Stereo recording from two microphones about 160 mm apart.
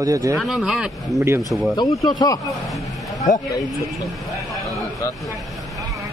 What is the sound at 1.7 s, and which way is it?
Speech, 20° left (ahead or behind).